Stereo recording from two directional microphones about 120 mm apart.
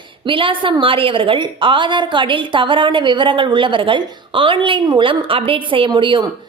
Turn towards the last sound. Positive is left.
turn(degrees=-40)  # may be behind; listen again after turning